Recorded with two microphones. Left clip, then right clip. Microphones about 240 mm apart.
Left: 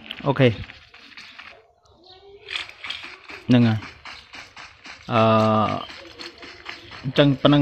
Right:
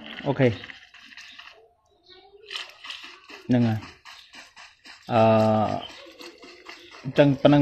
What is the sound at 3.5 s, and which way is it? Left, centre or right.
Speech, centre.